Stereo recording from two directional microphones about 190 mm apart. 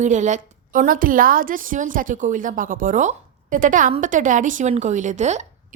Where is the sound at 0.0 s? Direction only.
40° right (ahead or behind).